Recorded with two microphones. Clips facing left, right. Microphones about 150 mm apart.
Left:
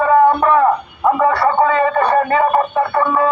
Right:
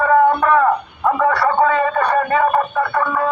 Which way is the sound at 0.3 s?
25° left (ahead or behind).